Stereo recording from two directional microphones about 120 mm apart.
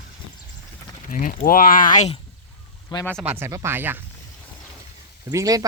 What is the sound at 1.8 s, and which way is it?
Speech, 85° left.